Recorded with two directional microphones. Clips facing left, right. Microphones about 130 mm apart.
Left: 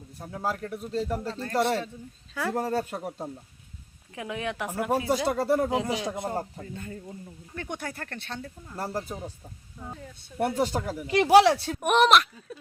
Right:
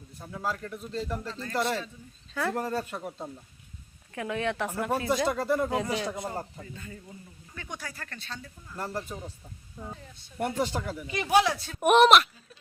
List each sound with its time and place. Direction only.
0.2 s a man's voice: 40° left (ahead or behind)
2.3 s speech: 10° left (ahead or behind)
2.6 s a man's voice: 35° left (ahead or behind)
3.1 s speech: 10° left (ahead or behind)
5.3 s a man's voice: 35° left (ahead or behind)
5.6 s speech: 15° left (ahead or behind)
6.6 s speech: 50° left (ahead or behind)
8.7 s a man's voice: 35° left (ahead or behind)
10.6 s a man's voice: 40° left (ahead or behind)
11.0 s speech: 80° left
11.8 s speech: centre (ahead or behind)